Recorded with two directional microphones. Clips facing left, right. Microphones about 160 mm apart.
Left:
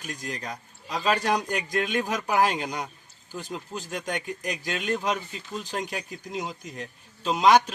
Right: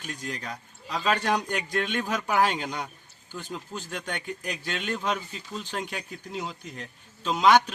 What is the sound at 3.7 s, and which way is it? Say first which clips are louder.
Speech: left 2 dB; 20° left (ahead or behind).